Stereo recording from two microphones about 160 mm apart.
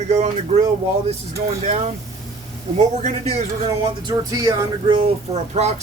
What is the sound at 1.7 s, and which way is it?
Speech, 45° right (ahead or behind).